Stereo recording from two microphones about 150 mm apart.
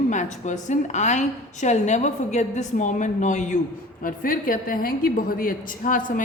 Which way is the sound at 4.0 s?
65° left (ahead or behind).